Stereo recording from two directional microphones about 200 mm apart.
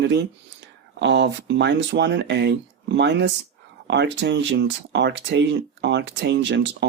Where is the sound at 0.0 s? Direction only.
60° right (ahead or behind).